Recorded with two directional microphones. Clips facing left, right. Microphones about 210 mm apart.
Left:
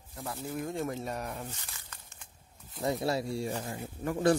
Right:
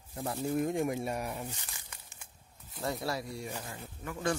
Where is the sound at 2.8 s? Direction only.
20° left (ahead or behind).